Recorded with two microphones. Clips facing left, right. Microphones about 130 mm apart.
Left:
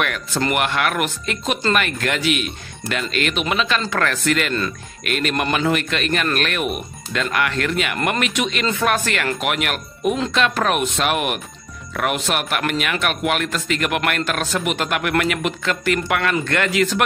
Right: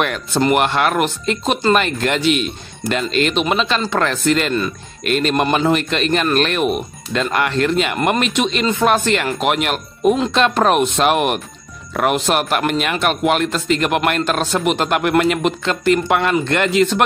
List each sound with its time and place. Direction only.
0.0 s speech: 30° right (ahead or behind)